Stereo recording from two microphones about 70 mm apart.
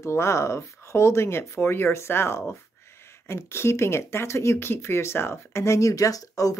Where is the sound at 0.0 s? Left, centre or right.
Left.